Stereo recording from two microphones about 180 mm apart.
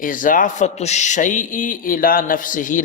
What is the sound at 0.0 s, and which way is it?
A man's voice, 50° left (ahead or behind).